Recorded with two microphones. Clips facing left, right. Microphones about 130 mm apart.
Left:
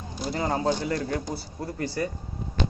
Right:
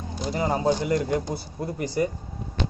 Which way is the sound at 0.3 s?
15° right (ahead or behind).